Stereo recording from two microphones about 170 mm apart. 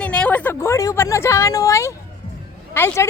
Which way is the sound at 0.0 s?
10° left (ahead or behind).